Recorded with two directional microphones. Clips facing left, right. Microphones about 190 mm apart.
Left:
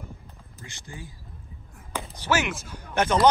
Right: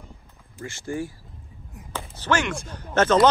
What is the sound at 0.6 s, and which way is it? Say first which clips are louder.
Speech: right 13 dB; 15° left (ahead or behind).